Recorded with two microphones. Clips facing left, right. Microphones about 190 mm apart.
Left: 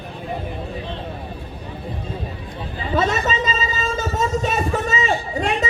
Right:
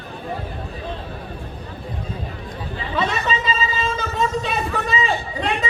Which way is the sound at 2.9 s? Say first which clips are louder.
Left 3 dB; 40° left (ahead or behind).